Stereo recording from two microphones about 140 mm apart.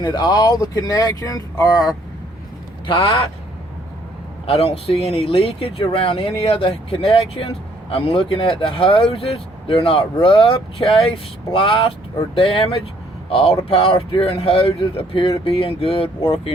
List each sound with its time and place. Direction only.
0.0 s speech: 30° left (ahead or behind)
2.8 s speech: 35° left (ahead or behind)
4.4 s speech: 45° left (ahead or behind)